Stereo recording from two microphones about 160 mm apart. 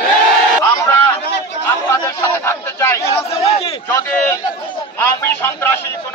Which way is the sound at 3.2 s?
40° left (ahead or behind).